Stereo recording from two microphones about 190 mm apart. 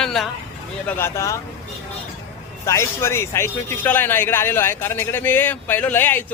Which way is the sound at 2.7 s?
15° left (ahead or behind).